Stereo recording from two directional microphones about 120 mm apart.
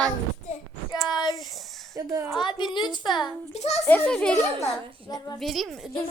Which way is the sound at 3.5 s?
60° left (ahead or behind).